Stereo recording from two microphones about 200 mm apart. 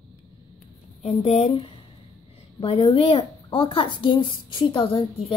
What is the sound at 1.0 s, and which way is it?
Speech, 30° left (ahead or behind).